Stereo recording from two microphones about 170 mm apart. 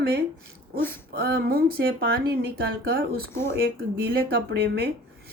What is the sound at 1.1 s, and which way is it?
A woman's voice, 65° right (ahead or behind).